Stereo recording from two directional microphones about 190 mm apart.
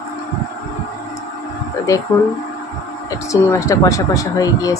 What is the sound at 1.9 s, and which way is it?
Speech, 15° left (ahead or behind).